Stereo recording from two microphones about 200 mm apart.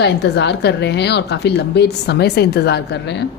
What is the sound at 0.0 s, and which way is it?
A woman's voice, 55° left (ahead or behind).